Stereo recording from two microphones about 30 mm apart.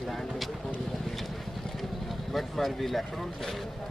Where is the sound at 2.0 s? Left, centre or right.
Centre.